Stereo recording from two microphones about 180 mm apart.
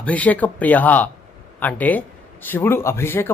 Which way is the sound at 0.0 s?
10° left (ahead or behind).